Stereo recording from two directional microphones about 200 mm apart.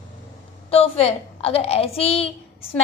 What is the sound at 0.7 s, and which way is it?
A woman's voice, 30° left (ahead or behind).